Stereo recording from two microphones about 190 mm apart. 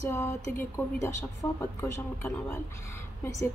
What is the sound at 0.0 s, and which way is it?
A woman's voice, 15° left (ahead or behind).